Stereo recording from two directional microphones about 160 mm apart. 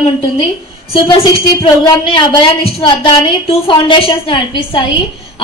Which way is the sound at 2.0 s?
30° left (ahead or behind).